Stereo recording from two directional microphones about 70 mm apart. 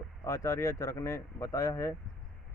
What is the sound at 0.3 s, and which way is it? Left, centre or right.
A man's voice, left.